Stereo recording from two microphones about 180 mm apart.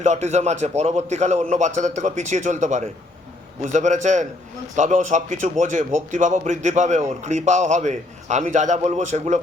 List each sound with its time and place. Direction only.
0.0 s a man's voice: 40° right (ahead or behind)